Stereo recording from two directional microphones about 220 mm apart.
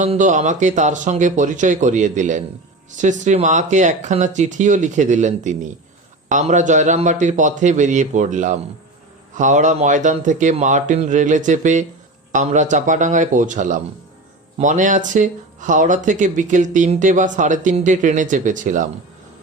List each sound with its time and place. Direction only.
0.0 s speech: 35° right (ahead or behind)